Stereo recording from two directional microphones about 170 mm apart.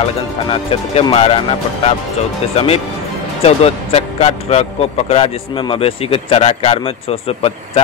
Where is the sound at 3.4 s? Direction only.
35° left (ahead or behind).